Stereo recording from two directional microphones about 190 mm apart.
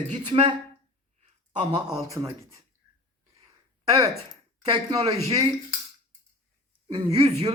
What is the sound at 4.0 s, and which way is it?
Speech, 20° right (ahead or behind).